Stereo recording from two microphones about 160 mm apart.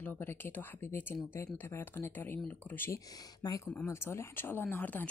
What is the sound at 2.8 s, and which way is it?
Speech, 20° left (ahead or behind).